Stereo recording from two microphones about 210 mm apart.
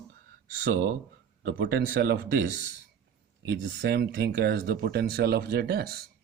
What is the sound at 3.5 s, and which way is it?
Speech, 55° right (ahead or behind).